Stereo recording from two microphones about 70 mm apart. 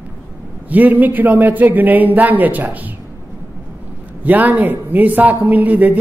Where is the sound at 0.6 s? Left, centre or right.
Right.